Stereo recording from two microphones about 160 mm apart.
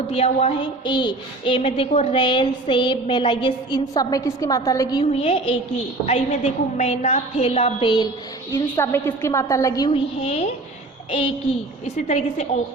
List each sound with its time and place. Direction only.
0.1 s a woman's voice: 40° left (ahead or behind)
0.6 s a woman's voice: 30° left (ahead or behind)
5.1 s a woman's voice: 35° left (ahead or behind)
8.5 s a woman's voice: 15° left (ahead or behind)
9.9 s a woman's voice: 35° left (ahead or behind)
11.9 s a woman's voice: 45° left (ahead or behind)